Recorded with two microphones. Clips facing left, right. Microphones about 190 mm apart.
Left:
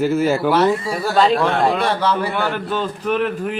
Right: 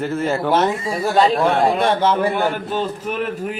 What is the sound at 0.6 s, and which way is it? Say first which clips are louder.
Speech: left 2 dB; 20° right (ahead or behind).